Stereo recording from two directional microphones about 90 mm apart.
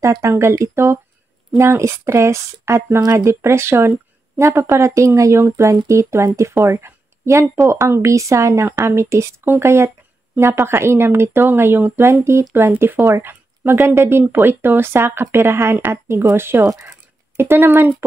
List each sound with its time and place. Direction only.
0.0 s speech: 35° right (ahead or behind)
3.0 s speech: 45° right (ahead or behind)
3.3 s a woman's voice: 30° right (ahead or behind)
16.6 s speech: 40° right (ahead or behind)
17.4 s speech: 25° right (ahead or behind)